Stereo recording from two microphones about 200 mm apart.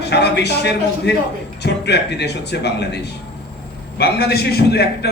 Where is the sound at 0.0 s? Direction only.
55° left (ahead or behind).